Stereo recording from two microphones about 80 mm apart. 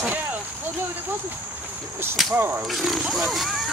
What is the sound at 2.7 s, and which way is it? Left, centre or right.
Speech, centre.